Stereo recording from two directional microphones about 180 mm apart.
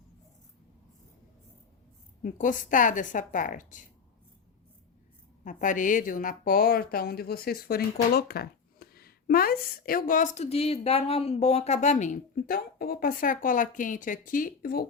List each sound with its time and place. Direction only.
2.2 s a woman's voice: 45° left (ahead or behind)
5.5 s a woman's voice: 45° left (ahead or behind)